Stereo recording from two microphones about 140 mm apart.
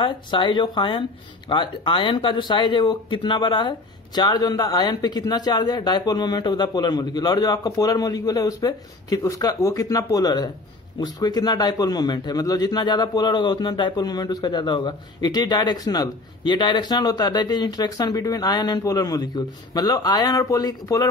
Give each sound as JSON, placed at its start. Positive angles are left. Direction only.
{"t": 0.0, "sound": "a man's voice", "side_deg": 35}